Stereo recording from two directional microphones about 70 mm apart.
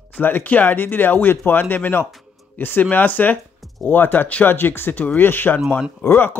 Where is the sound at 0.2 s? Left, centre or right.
Left.